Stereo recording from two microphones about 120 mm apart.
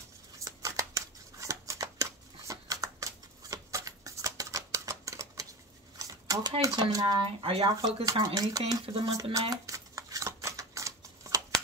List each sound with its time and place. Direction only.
0.4 s scissors: 25° right (ahead or behind)
5.9 s a sound: 30° right (ahead or behind)
6.6 s speech: 30° right (ahead or behind)
7.2 s speech: 50° right (ahead or behind)
7.7 s speech: 30° right (ahead or behind)
9.0 s shuffling cards: 30° right (ahead or behind)